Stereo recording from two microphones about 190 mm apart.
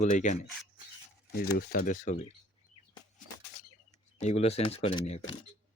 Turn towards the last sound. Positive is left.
turn(degrees=30)  # may be behind; listen again after turning